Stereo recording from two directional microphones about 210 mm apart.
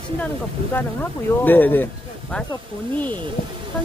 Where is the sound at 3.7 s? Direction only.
5° left (ahead or behind).